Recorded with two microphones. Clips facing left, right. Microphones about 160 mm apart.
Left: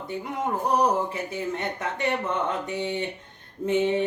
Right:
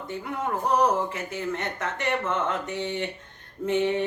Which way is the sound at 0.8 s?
15° left (ahead or behind).